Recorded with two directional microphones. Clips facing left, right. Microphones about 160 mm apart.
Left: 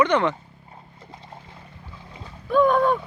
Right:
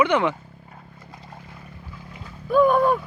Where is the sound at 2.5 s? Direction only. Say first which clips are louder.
Right 1 dB; 5° right (ahead or behind).